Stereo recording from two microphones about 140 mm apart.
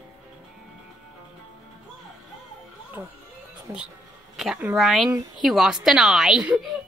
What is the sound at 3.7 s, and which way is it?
Speech, 25° right (ahead or behind).